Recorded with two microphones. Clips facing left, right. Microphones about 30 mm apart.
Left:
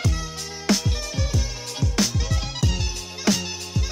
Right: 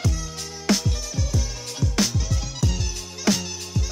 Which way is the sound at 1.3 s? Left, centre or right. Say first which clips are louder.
Left 1 dB; centre.